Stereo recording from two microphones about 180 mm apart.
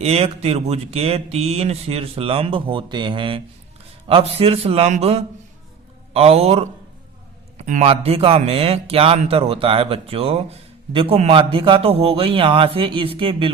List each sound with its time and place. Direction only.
0.0 s speech: 35° right (ahead or behind)